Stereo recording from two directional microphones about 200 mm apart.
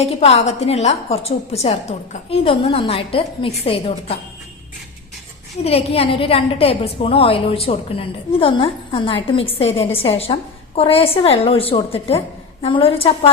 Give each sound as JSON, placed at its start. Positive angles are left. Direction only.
{"t": 0.0, "sound": "a woman's voice", "side_deg": 30}
{"t": 5.6, "sound": "a woman's voice", "side_deg": 30}